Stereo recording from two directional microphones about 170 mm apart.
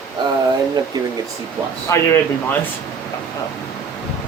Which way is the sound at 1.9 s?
20° left (ahead or behind).